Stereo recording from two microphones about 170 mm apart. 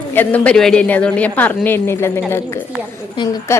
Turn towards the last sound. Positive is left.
turn(degrees=15)  # may be behind; listen again after turning